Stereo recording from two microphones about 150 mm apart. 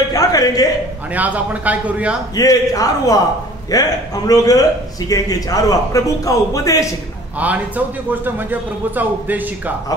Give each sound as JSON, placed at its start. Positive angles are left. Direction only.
{"t": 0.1, "sound": "music", "side_deg": 25}
{"t": 1.1, "sound": "a man's voice", "side_deg": -10}
{"t": 2.3, "sound": "a man's voice", "side_deg": 25}
{"t": 7.3, "sound": "a man's voice", "side_deg": -10}